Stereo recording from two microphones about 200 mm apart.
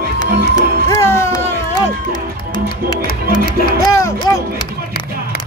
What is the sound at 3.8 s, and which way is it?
Music, 15° left (ahead or behind).